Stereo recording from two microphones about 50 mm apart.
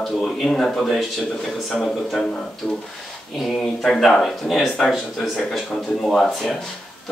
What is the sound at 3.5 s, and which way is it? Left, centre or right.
Speech, centre.